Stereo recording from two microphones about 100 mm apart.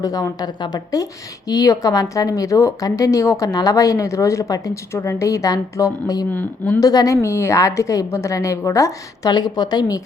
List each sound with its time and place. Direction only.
0.0 s a woman's voice: 40° left (ahead or behind)
6.3 s speech: 20° left (ahead or behind)
6.7 s a woman's voice: 35° left (ahead or behind)
9.3 s a woman's voice: 45° left (ahead or behind)